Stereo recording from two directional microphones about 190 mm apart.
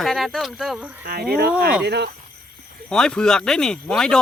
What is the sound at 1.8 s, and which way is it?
Speech, 60° right (ahead or behind).